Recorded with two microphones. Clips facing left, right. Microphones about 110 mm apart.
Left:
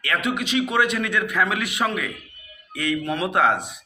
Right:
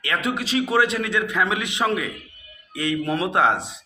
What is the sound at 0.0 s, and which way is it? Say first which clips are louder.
A man's voice: even; 30° right (ahead or behind).